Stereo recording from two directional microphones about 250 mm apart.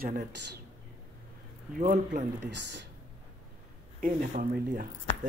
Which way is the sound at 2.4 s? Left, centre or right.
Right.